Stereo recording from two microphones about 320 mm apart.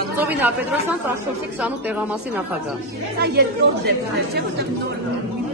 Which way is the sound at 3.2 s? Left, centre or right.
Right.